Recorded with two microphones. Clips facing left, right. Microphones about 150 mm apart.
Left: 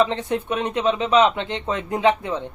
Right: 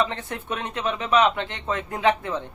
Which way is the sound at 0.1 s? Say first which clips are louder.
Left 7 dB; 20° left (ahead or behind).